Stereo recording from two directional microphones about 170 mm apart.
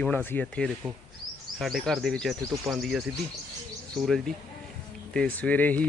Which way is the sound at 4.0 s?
Centre (ahead or behind).